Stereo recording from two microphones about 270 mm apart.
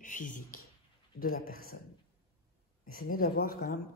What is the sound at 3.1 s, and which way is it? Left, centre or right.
Speech, left.